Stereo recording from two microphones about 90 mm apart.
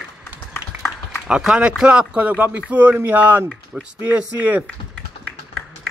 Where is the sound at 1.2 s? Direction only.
10° right (ahead or behind).